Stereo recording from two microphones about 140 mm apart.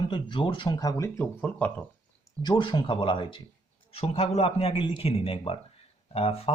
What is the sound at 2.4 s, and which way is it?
Speech, 35° left (ahead or behind).